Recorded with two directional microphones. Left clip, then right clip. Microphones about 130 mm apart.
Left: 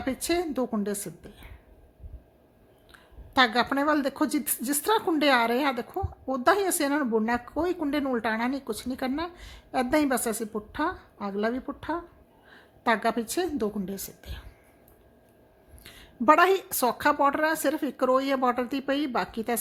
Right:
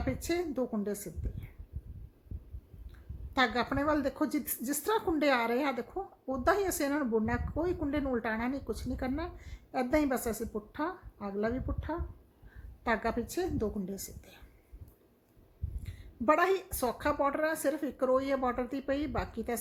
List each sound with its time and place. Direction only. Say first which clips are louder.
0.0 s speech: left 6 dB; 20° left (ahead or behind)
3.3 s speech: left 7 dB; 20° left (ahead or behind)
15.8 s speech: left 8 dB; 25° left (ahead or behind)